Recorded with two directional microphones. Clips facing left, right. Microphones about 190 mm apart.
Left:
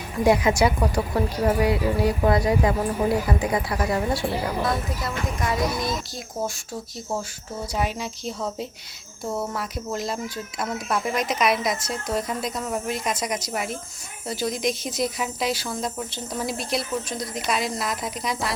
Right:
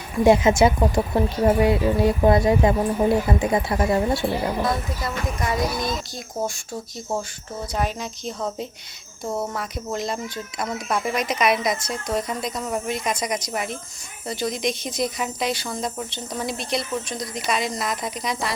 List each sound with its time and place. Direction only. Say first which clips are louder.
0.3 s a woman's voice: right 3 dB; 25° right (ahead or behind)
4.6 s speech: right 1 dB; centre (ahead or behind)
7.7 s a woman's voice: right 1 dB; 10° left (ahead or behind)